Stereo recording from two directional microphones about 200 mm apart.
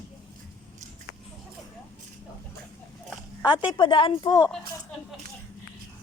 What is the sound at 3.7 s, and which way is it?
Speech, 25° left (ahead or behind).